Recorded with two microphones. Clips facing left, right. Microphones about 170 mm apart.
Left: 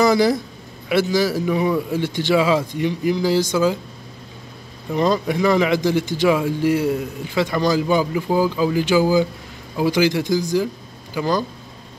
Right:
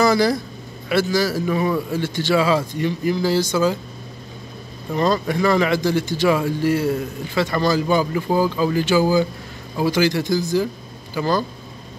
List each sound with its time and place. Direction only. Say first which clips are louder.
0.0 s a man's voice: left 1 dB; 20° left (ahead or behind)
4.9 s a man's voice: left 1 dB; 15° left (ahead or behind)